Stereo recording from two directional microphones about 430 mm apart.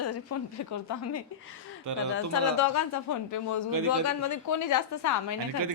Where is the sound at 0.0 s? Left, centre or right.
Left.